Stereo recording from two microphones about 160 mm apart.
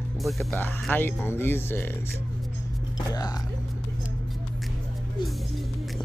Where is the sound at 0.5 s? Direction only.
10° left (ahead or behind).